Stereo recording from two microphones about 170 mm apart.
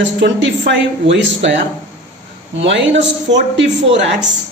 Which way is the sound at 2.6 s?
90° right.